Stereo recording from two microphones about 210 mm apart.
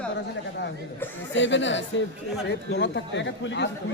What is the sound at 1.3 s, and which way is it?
Speech, 60° left (ahead or behind).